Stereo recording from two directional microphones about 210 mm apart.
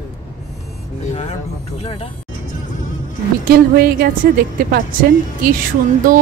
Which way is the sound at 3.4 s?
45° right (ahead or behind).